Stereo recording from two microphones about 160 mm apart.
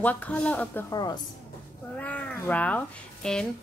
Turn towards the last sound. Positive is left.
turn(degrees=5)  # may be behind; listen again after turning